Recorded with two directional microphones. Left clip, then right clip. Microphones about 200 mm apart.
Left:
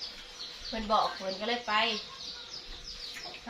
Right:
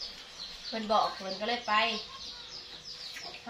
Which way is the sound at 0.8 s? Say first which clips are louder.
Even; 15° right (ahead or behind).